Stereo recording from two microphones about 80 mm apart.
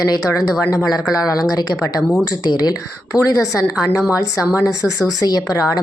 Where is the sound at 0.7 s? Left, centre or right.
Left.